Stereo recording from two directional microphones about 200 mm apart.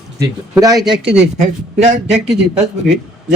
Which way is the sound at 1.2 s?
35° right (ahead or behind).